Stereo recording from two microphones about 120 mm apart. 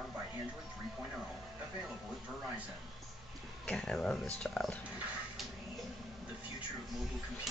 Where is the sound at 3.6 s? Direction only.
10° left (ahead or behind).